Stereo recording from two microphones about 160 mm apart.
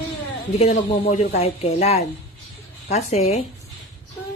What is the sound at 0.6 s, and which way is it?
A woman's voice, 45° left (ahead or behind).